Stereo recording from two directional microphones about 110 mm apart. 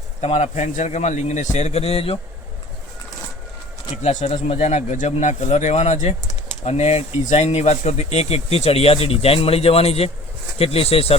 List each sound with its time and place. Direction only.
0.2 s speech: 70° left (ahead or behind)
3.9 s speech: 90° left; by 11.2 s 65° left (ahead or behind)